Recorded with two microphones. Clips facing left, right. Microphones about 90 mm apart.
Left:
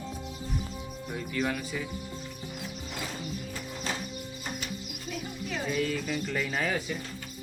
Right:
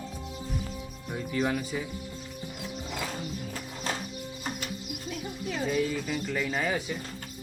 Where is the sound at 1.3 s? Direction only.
20° right (ahead or behind).